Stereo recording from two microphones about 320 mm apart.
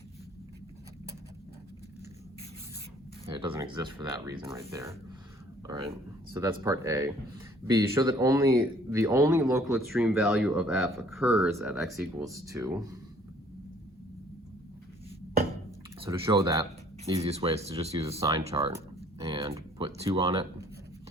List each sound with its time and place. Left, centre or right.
3.3 s speech: centre
6.3 s speech: centre
16.0 s speech: centre